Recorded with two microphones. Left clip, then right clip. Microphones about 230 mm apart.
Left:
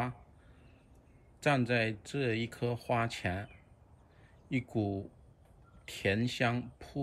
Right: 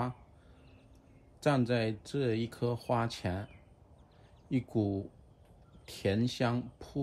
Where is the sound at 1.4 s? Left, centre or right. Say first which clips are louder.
Even; centre.